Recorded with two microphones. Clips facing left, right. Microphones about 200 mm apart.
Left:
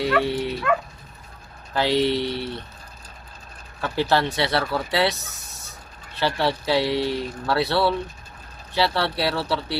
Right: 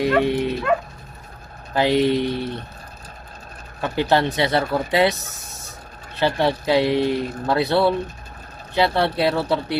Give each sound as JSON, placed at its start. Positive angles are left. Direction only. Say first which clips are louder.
{"t": 0.0, "sound": "speech", "louder": "right 4 dB", "side_deg": -15}
{"t": 1.7, "sound": "speech", "louder": "right 3 dB", "side_deg": -15}
{"t": 3.8, "sound": "speech", "louder": "right 3 dB", "side_deg": -15}
{"t": 6.1, "sound": "speech", "louder": "right 3 dB", "side_deg": -15}